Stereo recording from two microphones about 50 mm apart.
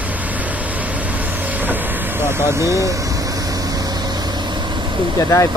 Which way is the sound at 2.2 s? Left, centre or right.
Right.